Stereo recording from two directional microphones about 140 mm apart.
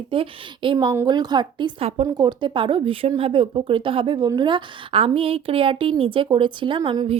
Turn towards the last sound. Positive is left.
turn(degrees=-30)  # may be behind; listen again after turning